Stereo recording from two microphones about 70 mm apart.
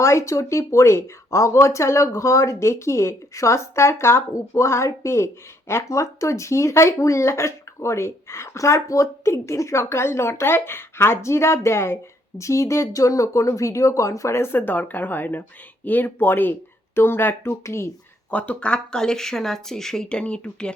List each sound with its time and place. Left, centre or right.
0.0 s speech: left
18.3 s speech: centre